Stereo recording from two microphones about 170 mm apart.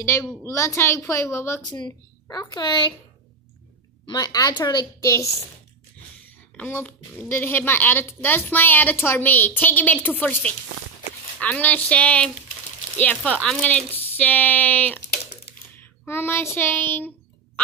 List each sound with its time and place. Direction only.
0.0 s a woman's voice: 15° left (ahead or behind)
4.0 s a woman's voice: 25° left (ahead or behind)
6.5 s a woman's voice: 10° left (ahead or behind)
15.7 s a sound: 10° left (ahead or behind)